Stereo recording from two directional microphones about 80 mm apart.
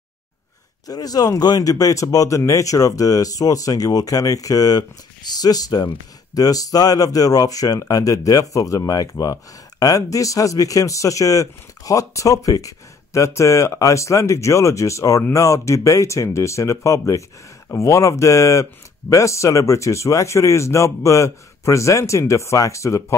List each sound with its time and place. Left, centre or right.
0.8 s speech: left